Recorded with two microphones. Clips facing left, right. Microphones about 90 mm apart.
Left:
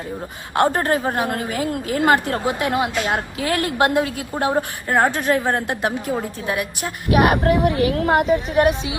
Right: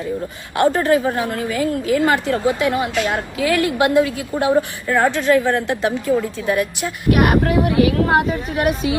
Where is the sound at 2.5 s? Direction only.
20° left (ahead or behind).